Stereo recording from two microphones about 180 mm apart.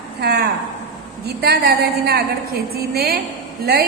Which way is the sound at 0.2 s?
65° right (ahead or behind).